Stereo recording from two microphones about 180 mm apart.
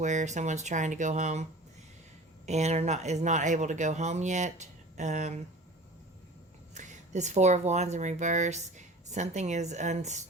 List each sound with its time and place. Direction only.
0.0 s speech: 40° right (ahead or behind)
2.5 s speech: 40° right (ahead or behind)
6.7 s speech: 40° right (ahead or behind)